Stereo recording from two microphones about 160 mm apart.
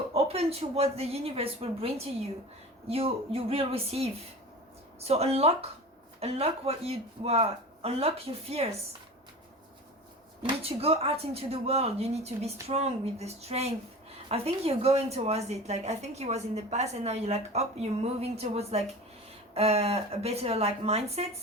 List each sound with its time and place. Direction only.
0.1 s a woman's voice: 40° right (ahead or behind)
10.6 s a woman's voice: 40° right (ahead or behind)